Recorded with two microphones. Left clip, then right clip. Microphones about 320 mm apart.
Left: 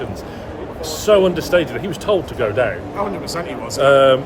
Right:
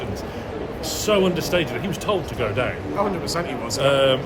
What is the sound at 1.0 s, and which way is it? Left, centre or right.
Speech, centre.